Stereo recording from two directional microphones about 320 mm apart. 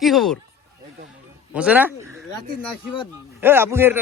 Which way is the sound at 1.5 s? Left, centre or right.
Centre.